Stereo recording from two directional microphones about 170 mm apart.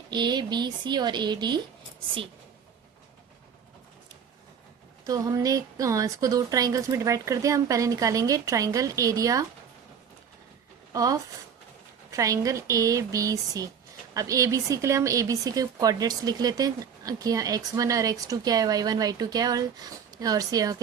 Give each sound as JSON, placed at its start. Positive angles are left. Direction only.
{"t": 0.1, "sound": "speech", "side_deg": -25}
{"t": 5.0, "sound": "speech", "side_deg": -20}
{"t": 10.9, "sound": "speech", "side_deg": -20}